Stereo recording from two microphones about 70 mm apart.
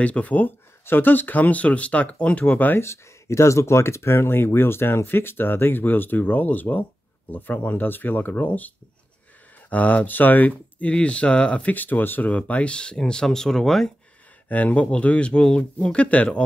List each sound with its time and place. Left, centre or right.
0.0 s speech: left
2.8 s speech: left; by 13.9 s centre
14.5 s speech: left